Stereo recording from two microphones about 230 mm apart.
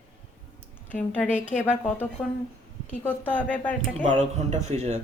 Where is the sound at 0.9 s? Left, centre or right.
Centre.